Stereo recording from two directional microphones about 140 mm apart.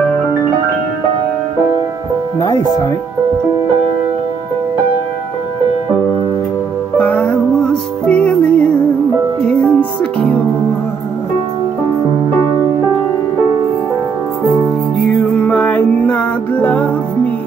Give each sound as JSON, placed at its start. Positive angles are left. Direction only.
{"t": 2.4, "sound": "speech", "side_deg": 30}
{"t": 7.0, "sound": "music", "side_deg": 10}
{"t": 15.3, "sound": "music", "side_deg": 10}